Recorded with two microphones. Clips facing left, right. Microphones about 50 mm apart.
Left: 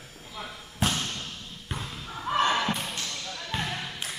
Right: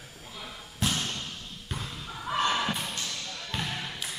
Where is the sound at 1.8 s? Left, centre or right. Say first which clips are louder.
Left 3 dB; centre.